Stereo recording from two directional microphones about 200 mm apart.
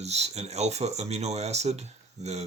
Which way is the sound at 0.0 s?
30° right (ahead or behind).